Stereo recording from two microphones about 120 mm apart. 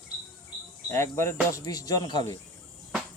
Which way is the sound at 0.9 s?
20° left (ahead or behind).